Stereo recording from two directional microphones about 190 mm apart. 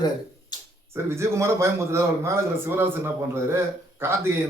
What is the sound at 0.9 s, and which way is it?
A man's voice, 15° right (ahead or behind).